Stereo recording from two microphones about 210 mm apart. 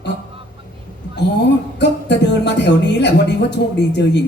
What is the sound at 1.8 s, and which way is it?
Speech, 55° left (ahead or behind).